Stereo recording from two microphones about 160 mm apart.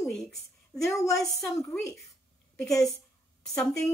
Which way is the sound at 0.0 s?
Centre (ahead or behind).